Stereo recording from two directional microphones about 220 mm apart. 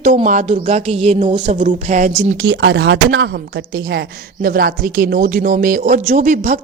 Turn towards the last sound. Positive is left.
turn(degrees=-35)  # may be behind; listen again after turning